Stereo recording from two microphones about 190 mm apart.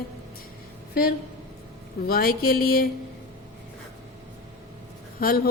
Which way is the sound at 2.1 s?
50° left (ahead or behind).